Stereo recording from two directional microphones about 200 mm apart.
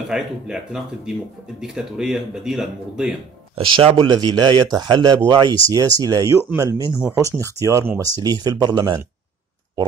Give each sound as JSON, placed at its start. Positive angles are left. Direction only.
{"t": 0.1, "sound": "speech", "side_deg": -5}
{"t": 3.5, "sound": "speech", "side_deg": -25}